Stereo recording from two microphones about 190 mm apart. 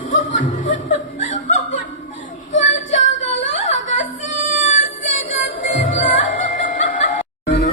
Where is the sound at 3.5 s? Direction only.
40° left (ahead or behind).